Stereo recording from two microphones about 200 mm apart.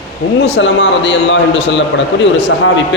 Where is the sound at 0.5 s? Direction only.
65° left (ahead or behind).